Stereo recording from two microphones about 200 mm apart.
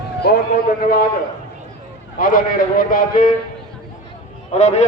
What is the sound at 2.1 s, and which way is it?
A man's voice, 45° left (ahead or behind).